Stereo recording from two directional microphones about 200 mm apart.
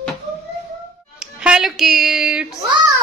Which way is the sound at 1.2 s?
5° right (ahead or behind).